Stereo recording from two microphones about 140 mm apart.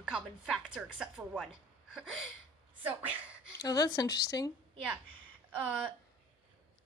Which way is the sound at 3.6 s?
25° left (ahead or behind).